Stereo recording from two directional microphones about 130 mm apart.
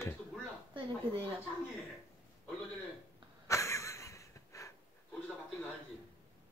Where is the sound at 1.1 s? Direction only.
45° right (ahead or behind).